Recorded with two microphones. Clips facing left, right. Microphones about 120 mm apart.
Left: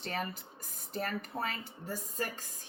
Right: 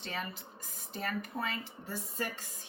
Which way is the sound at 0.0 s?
45° left (ahead or behind).